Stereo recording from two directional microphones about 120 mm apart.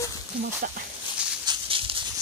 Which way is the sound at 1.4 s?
45° right (ahead or behind).